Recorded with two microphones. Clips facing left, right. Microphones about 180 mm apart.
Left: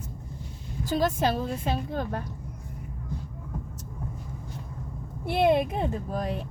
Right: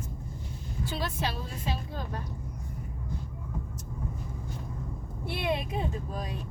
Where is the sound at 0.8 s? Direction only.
45° left (ahead or behind).